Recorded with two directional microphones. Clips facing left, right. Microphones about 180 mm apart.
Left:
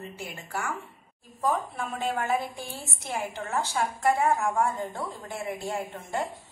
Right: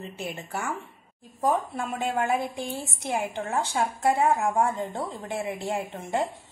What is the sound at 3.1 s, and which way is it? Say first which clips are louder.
A woman's voice: right 3 dB; 15° right (ahead or behind).